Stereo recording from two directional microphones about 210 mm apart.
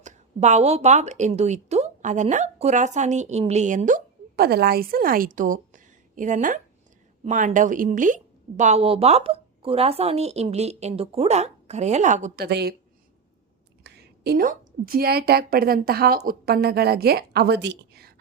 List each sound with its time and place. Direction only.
0.0 s a woman's voice: 35° right (ahead or behind)
12.5 s a woman's voice: 50° right (ahead or behind)
13.8 s a woman's voice: 50° right (ahead or behind)